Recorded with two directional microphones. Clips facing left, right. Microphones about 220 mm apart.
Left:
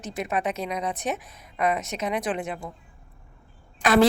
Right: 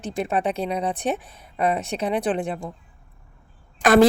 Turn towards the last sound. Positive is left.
turn(degrees=-45)  # may be behind; listen again after turning